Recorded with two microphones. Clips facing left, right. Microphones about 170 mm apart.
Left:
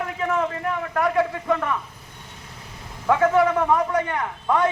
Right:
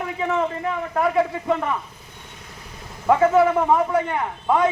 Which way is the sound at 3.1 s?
10° right (ahead or behind).